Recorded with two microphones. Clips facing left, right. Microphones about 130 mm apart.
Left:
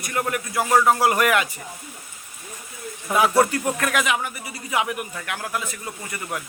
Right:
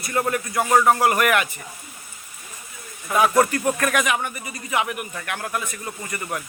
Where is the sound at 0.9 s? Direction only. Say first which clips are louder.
Even; 15° left (ahead or behind).